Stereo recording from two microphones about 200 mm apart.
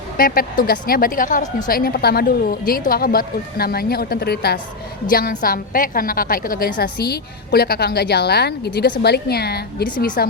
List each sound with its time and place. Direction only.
0.2 s a woman's voice: 45° left (ahead or behind)